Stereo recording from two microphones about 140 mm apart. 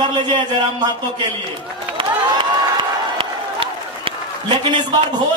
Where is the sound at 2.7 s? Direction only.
40° right (ahead or behind).